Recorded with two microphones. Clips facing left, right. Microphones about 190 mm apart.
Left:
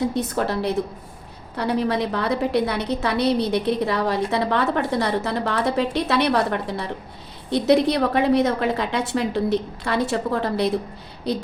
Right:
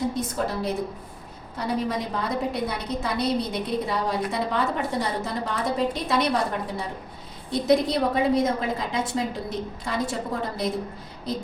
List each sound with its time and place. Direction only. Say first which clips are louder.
0.1 s a woman's voice: left 4 dB; 70° left (ahead or behind)